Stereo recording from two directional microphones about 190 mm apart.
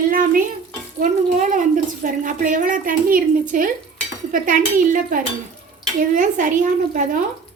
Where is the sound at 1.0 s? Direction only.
45° right (ahead or behind).